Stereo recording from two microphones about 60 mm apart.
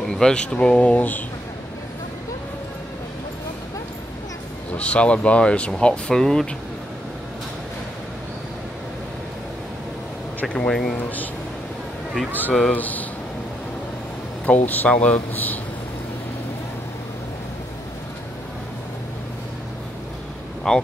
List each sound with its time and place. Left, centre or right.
0.1 s speech: centre
4.7 s speech: left
10.7 s speech: centre
11.0 s speech: left
12.3 s speech: left
14.4 s speech: left
20.7 s speech: centre